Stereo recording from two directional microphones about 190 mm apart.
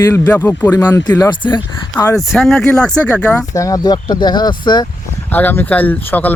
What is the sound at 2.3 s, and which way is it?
Speech, centre (ahead or behind).